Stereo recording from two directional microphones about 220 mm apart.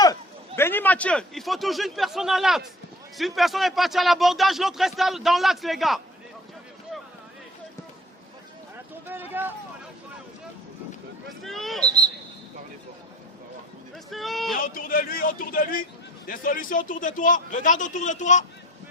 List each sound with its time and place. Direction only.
0.0 s speech: 15° left (ahead or behind)
9.0 s a sound: 10° right (ahead or behind)
11.4 s speech: centre (ahead or behind)
14.1 s speech: centre (ahead or behind)
14.5 s a man's voice: 40° left (ahead or behind)